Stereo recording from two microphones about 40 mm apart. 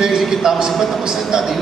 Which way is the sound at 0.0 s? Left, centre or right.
Centre.